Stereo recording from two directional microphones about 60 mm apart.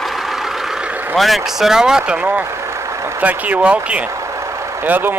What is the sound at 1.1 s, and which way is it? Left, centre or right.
Speech, centre.